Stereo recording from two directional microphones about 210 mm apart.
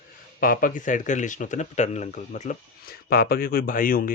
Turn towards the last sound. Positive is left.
turn(degrees=40)  # may be behind; listen again after turning